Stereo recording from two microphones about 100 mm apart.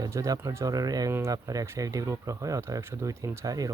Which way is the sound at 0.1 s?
35° right (ahead or behind).